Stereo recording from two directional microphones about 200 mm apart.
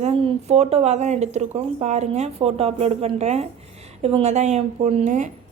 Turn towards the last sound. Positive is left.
turn(degrees=-35)  # may be behind; listen again after turning